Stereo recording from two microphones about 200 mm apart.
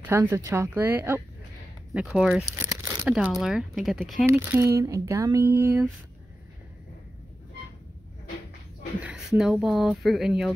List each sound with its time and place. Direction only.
0.0 s speech: 10° right (ahead or behind)
2.4 s crumpling: 15° right (ahead or behind)
3.1 s speech: 5° right (ahead or behind)
4.3 s speech: 10° right (ahead or behind)
9.0 s speech: 5° right (ahead or behind)